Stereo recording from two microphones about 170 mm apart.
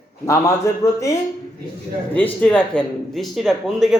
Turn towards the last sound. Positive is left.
turn(degrees=0)  # may be behind; listen again after turning